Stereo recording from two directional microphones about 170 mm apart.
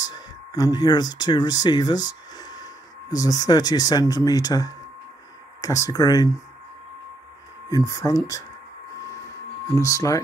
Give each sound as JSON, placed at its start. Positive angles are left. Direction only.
{"t": 0.0, "sound": "speech", "side_deg": 20}
{"t": 7.7, "sound": "speech", "side_deg": 20}
{"t": 9.8, "sound": "speech", "side_deg": 20}